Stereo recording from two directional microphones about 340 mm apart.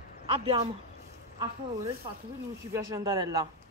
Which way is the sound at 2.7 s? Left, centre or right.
Centre.